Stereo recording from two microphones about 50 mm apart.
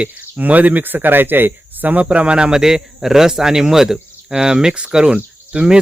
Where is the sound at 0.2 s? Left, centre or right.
Right.